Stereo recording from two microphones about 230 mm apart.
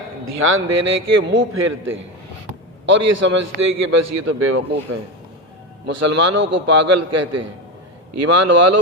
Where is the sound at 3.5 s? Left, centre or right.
Right.